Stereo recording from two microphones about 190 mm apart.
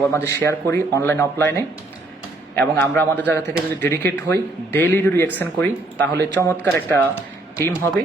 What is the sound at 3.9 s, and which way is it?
A man's voice, 10° left (ahead or behind).